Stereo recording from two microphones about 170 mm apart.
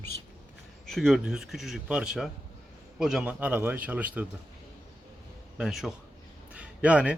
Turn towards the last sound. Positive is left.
turn(degrees=-5)  # may be behind; listen again after turning